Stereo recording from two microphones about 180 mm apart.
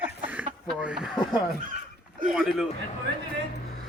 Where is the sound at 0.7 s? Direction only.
5° right (ahead or behind).